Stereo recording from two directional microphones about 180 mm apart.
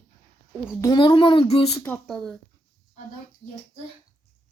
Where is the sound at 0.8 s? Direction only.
25° left (ahead or behind).